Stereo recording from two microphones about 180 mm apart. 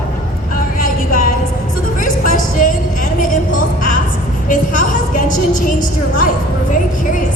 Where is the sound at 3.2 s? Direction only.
45° left (ahead or behind).